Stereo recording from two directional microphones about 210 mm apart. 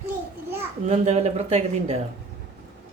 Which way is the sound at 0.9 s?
30° right (ahead or behind).